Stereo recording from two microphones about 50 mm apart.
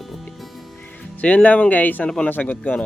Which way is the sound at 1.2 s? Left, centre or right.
Left.